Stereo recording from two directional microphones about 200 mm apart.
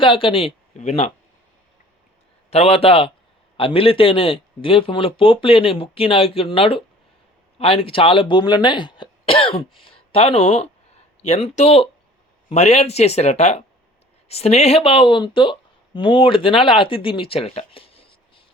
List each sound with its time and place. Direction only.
0.0 s speech: 25° left (ahead or behind)
2.5 s speech: 30° left (ahead or behind)